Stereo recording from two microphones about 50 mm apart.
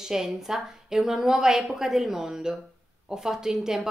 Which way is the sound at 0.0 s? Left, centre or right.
Centre.